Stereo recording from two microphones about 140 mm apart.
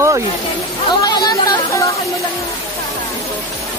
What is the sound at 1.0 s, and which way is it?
Chatter, 30° left (ahead or behind).